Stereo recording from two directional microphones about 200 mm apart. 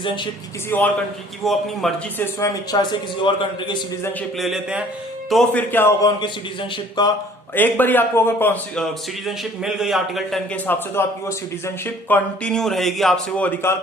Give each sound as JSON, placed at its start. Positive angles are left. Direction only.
{"t": 0.7, "sound": "a man's voice", "side_deg": 10}
{"t": 4.0, "sound": "a man's voice", "side_deg": 5}
{"t": 7.5, "sound": "a man's voice", "side_deg": 10}